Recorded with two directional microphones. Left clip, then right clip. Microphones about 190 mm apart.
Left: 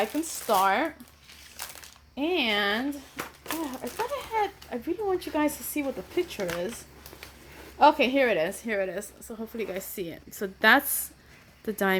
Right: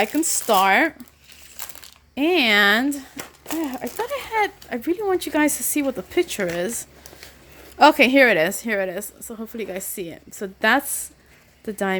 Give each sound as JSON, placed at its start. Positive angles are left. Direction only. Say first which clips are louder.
{"t": 0.0, "sound": "speech", "louder": "right 7 dB", "side_deg": -50}
{"t": 2.1, "sound": "speech", "louder": "right 9 dB", "side_deg": -50}
{"t": 4.1, "sound": "a woman's voice", "louder": "right 7 dB", "side_deg": -55}